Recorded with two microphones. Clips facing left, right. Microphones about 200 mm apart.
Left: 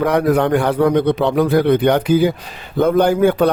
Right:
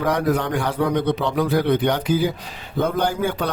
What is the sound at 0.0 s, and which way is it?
Speech, 60° left (ahead or behind).